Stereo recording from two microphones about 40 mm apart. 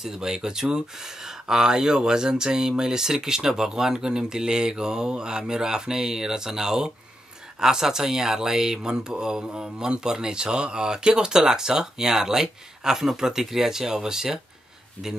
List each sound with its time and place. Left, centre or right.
0.0 s speech: centre